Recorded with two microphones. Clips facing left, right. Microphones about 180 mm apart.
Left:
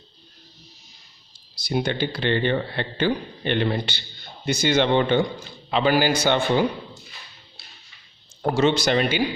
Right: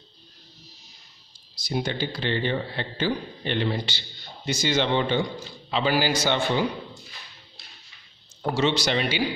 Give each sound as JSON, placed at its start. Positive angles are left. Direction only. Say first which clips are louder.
{"t": 1.5, "sound": "a man's voice", "louder": "left 4 dB", "side_deg": 65}
{"t": 8.4, "sound": "a man's voice", "louder": "left 4 dB", "side_deg": 50}